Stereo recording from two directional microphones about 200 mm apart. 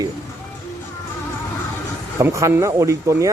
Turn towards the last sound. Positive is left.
turn(degrees=-15)  # may be behind; listen again after turning